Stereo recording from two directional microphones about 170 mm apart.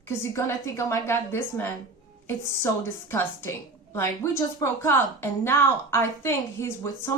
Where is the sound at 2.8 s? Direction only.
15° left (ahead or behind).